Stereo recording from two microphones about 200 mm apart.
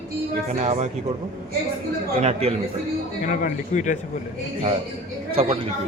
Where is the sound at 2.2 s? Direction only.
30° right (ahead or behind).